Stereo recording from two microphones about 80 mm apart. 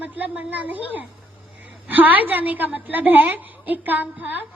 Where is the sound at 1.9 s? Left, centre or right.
Right.